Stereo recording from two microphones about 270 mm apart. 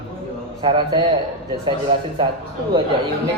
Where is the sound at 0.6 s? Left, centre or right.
Centre.